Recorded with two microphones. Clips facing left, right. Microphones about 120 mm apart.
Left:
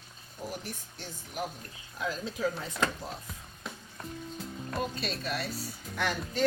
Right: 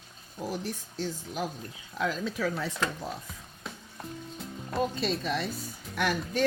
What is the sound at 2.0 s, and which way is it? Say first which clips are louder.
Speech: right 2 dB; 90° right.